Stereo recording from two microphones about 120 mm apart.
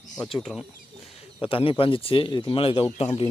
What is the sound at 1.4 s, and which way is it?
Speech, 50° left (ahead or behind).